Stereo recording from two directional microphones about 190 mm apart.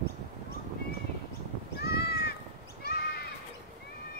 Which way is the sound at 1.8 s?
55° left (ahead or behind).